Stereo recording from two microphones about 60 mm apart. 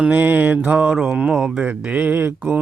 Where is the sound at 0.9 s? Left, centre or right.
Centre.